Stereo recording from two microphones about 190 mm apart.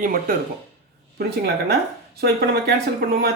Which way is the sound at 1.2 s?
55° right (ahead or behind).